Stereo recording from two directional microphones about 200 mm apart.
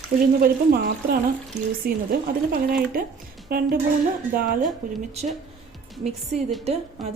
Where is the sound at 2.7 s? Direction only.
45° right (ahead or behind).